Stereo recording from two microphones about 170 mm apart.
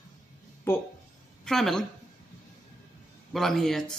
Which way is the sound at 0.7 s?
15° left (ahead or behind).